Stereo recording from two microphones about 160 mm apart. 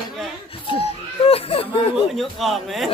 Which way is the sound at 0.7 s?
35° left (ahead or behind).